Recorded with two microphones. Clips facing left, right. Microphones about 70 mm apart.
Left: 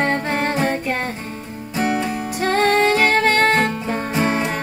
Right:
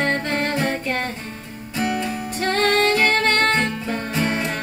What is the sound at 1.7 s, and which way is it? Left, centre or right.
Music, left.